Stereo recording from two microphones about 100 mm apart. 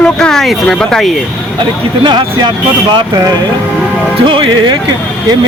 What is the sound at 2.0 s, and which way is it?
Speech, 50° right (ahead or behind).